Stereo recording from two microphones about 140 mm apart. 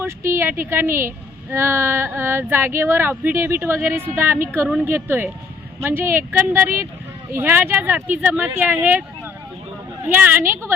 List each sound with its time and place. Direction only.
0.3 s a woman's voice: 15° right (ahead or behind)
10.1 s a woman's voice: 10° right (ahead or behind)